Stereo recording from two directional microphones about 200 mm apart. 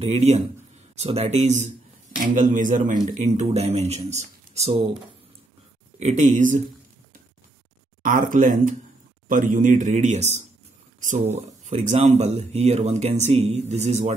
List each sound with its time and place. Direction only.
0.0 s speech: 30° right (ahead or behind)
5.9 s speech: 35° right (ahead or behind)
8.0 s speech: 40° right (ahead or behind)